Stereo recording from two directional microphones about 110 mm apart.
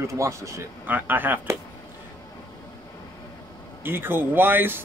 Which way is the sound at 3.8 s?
20° right (ahead or behind).